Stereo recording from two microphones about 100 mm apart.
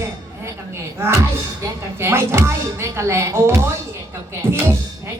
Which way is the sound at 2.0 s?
25° right (ahead or behind).